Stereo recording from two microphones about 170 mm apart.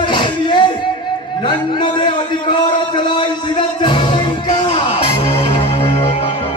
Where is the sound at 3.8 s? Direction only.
30° left (ahead or behind).